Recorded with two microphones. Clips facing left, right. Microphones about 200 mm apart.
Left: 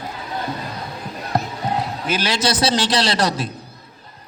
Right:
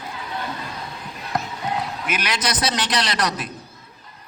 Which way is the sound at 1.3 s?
30° left (ahead or behind).